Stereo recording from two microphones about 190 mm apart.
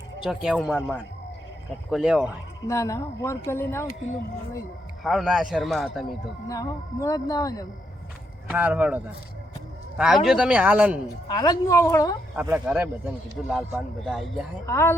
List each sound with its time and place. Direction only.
0.2 s a man's voice: centre (ahead or behind)
2.6 s speech: 15° left (ahead or behind)
5.0 s a man's voice: centre (ahead or behind)
6.5 s speech: 15° left (ahead or behind)
8.4 s speech: 10° right (ahead or behind)
10.2 s speech: 5° right (ahead or behind)
11.3 s a woman's voice: 20° left (ahead or behind)
12.4 s a man's voice: 10° right (ahead or behind)
14.7 s speech: 15° left (ahead or behind)